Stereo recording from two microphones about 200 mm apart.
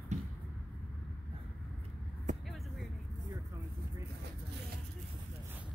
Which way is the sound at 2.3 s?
35° right (ahead or behind).